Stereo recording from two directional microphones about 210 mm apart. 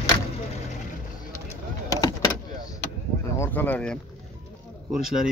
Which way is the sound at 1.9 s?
20° left (ahead or behind).